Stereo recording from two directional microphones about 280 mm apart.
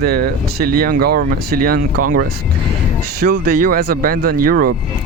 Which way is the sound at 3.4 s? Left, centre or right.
Right.